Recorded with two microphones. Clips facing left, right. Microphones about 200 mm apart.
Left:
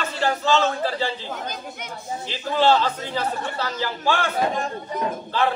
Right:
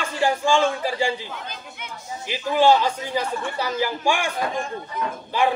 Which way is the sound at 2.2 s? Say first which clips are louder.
Right 2 dB; 15° right (ahead or behind).